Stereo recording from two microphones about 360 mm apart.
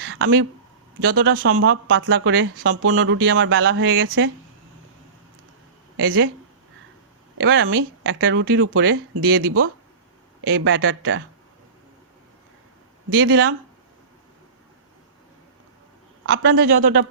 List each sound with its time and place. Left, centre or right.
0.0 s a sound: right
0.9 s speech: right
6.0 s speech: right
7.3 s speech: right
13.1 s speech: right
16.2 s speech: right